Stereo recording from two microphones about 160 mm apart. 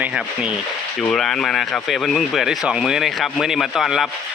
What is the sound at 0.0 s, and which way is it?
Speech, 5° right (ahead or behind).